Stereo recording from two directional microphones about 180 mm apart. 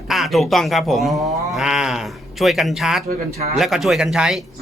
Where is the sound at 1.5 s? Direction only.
5° right (ahead or behind).